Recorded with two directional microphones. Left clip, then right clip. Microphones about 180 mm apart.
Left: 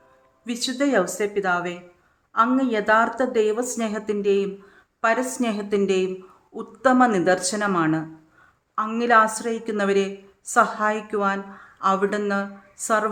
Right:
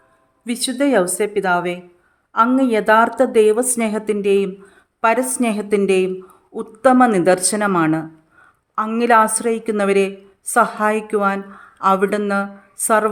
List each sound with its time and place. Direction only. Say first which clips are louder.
0.4 s a woman's voice: right 5 dB; 30° right (ahead or behind)